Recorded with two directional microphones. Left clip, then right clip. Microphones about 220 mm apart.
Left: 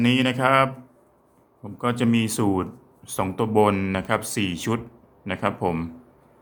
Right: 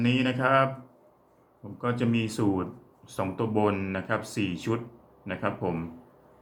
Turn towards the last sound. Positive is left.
turn(degrees=35)  # may be behind; listen again after turning